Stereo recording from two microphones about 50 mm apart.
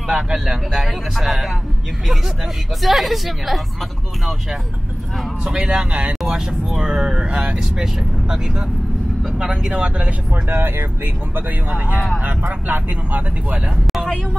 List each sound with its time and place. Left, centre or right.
0.1 s speech: centre
2.8 s speech: centre
5.4 s speech: centre
6.2 s speech: centre
10.3 s speech: right
11.3 s speech: right